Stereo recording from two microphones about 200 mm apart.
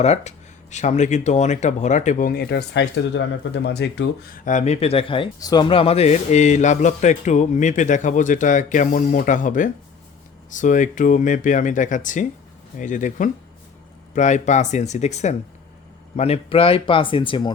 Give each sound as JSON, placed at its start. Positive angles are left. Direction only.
{"t": 0.0, "sound": "speech", "side_deg": 35}